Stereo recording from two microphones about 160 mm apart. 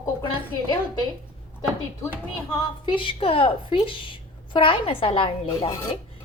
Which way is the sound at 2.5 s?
30° left (ahead or behind).